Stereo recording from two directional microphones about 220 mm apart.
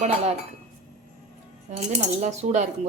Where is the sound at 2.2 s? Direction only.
30° right (ahead or behind).